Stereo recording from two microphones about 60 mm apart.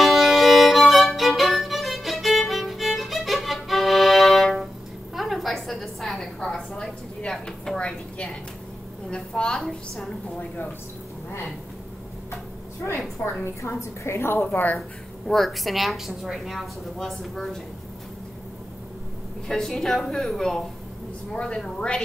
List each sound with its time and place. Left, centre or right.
0.0 s violin: centre
5.1 s a sound: centre
13.2 s a woman's voice: left
13.6 s a woman's voice: left
15.2 s a woman's voice: centre
19.4 s a woman's voice: centre